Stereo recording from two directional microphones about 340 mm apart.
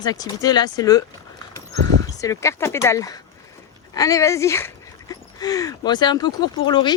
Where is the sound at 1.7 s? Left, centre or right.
Right.